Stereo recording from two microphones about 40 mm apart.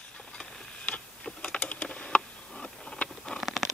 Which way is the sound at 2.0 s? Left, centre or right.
Centre.